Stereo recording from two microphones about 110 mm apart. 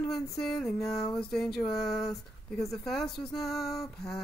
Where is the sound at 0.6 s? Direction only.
30° left (ahead or behind).